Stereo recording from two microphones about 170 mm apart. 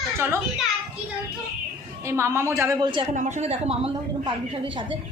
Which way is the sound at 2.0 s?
15° right (ahead or behind).